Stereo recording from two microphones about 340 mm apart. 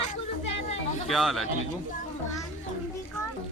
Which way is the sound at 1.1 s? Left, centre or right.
Centre.